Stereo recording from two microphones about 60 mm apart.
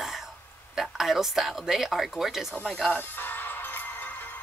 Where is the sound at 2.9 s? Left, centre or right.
Left.